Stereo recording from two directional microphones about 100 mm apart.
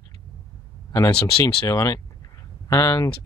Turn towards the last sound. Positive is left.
turn(degrees=35)  # may be behind; listen again after turning